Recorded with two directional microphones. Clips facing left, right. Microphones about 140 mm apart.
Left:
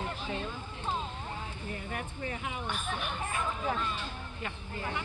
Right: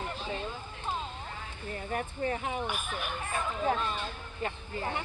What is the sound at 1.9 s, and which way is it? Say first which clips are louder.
Speech: right 8 dB; 40° right (ahead or behind).